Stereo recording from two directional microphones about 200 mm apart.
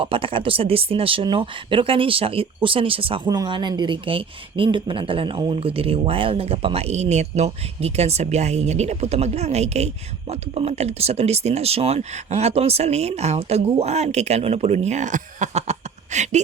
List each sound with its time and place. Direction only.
0.0 s speech: 25° right (ahead or behind)